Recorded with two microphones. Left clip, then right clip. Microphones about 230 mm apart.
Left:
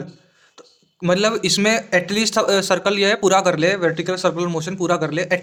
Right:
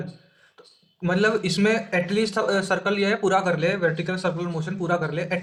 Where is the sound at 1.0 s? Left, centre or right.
Left.